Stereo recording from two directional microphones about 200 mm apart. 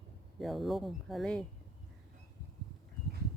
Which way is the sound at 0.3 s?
Centre (ahead or behind).